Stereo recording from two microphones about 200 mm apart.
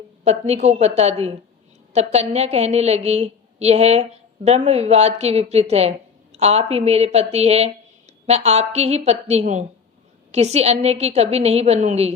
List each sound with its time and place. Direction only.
0.3 s a woman's voice: 30° right (ahead or behind)